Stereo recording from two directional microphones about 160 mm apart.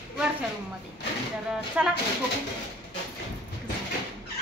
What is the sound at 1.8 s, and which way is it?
Speech, 10° right (ahead or behind).